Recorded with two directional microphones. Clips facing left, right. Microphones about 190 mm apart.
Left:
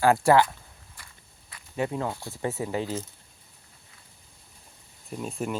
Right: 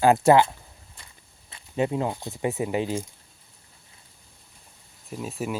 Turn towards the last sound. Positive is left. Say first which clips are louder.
# right 1 dB
turn(degrees=-5)  # may be behind; listen again after turning